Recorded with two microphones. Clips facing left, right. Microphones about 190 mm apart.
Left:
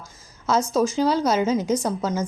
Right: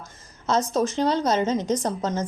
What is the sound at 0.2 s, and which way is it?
A woman's voice, 5° left (ahead or behind).